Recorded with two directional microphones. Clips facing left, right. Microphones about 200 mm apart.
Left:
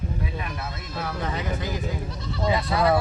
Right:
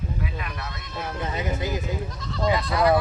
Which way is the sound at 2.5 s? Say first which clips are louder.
Even; 25° left (ahead or behind).